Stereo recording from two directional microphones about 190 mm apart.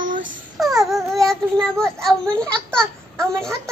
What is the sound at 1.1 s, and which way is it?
A child's voice, centre (ahead or behind).